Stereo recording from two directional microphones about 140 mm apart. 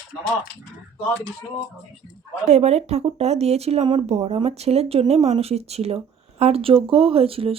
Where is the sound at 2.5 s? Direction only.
50° right (ahead or behind).